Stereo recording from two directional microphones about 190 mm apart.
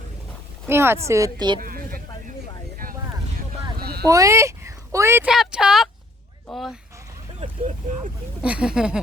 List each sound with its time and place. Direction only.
0.7 s speech: 15° right (ahead or behind)
1.6 s a sound: 50° right (ahead or behind)
3.3 s vehicle: 55° right (ahead or behind)
4.0 s speech: 15° right (ahead or behind)
5.3 s speech: 5° right (ahead or behind)
8.4 s speech: 5° right (ahead or behind)